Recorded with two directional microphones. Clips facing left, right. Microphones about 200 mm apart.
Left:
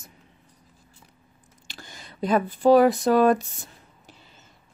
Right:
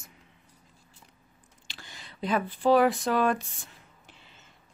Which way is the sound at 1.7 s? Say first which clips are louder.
Left 4 dB; 45° left (ahead or behind).